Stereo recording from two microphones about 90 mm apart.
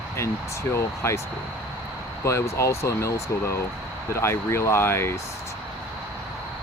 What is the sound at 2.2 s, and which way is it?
Speech, 30° left (ahead or behind).